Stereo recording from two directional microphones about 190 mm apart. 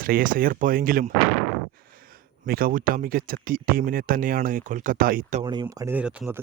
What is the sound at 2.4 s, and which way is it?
Speech, 50° right (ahead or behind).